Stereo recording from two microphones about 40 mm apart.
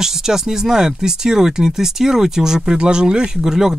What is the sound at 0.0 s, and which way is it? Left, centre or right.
Speech, centre.